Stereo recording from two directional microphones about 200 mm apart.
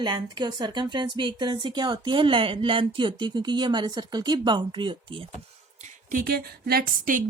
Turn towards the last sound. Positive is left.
turn(degrees=-45)  # may be behind; listen again after turning